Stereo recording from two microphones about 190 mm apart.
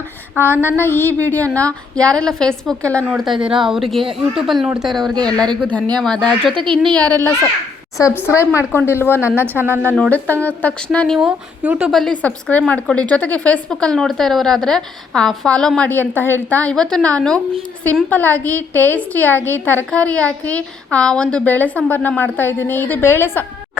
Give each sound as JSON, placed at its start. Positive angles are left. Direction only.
{"t": 0.4, "sound": "a woman's voice", "side_deg": 10}
{"t": 6.5, "sound": "a woman's voice", "side_deg": -25}
{"t": 6.8, "sound": "a woman's voice", "side_deg": 5}
{"t": 9.6, "sound": "a woman's voice", "side_deg": -10}
{"t": 10.0, "sound": "a woman's voice", "side_deg": 10}